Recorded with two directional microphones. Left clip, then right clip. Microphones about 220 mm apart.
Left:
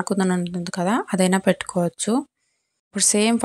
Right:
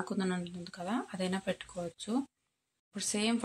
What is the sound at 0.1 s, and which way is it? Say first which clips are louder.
A woman's voice: left 13 dB; 40° left (ahead or behind).